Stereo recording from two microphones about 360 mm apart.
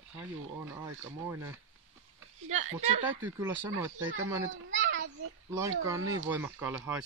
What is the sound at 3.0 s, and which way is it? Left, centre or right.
Speech, centre.